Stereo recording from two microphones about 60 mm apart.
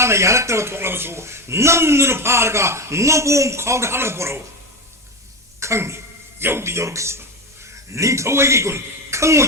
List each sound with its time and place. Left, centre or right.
0.0 s speech: right
5.5 s speech: right